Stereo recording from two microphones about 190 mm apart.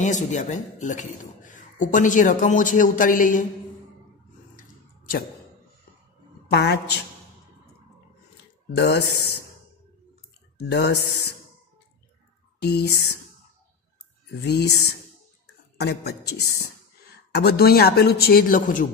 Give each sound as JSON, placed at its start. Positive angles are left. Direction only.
{"t": 0.0, "sound": "a man's voice", "side_deg": 40}
{"t": 4.6, "sound": "a sound", "side_deg": 45}
{"t": 6.5, "sound": "speech", "side_deg": 60}
{"t": 8.7, "sound": "speech", "side_deg": 60}
{"t": 10.7, "sound": "speech", "side_deg": 60}
{"t": 12.5, "sound": "speech", "side_deg": 60}
{"t": 14.4, "sound": "speech", "side_deg": 60}